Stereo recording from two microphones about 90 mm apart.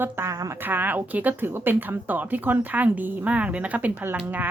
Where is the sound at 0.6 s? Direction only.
20° right (ahead or behind).